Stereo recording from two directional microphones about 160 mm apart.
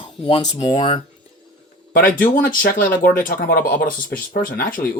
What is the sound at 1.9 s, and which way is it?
Speech, 60° left (ahead or behind).